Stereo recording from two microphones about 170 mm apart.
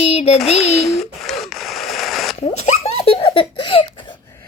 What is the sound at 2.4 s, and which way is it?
Giggle, 40° left (ahead or behind).